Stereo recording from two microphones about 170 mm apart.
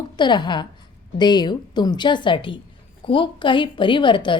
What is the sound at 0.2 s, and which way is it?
A woman's voice, 25° left (ahead or behind).